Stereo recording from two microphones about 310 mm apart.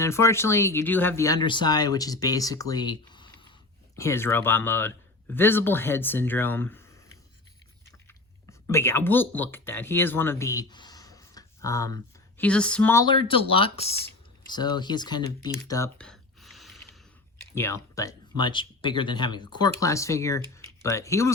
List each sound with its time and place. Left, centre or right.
0.0 s speech: centre
8.0 s speech: centre